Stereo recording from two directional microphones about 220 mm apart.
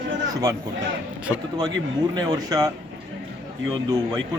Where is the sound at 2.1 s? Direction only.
15° right (ahead or behind).